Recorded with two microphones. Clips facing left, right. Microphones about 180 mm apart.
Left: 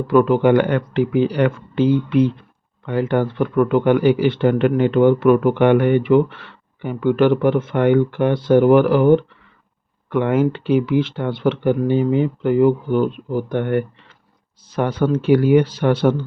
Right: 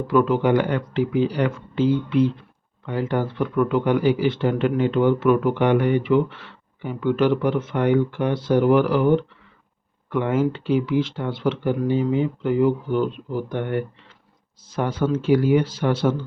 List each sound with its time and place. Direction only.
0.1 s speech: 55° left (ahead or behind)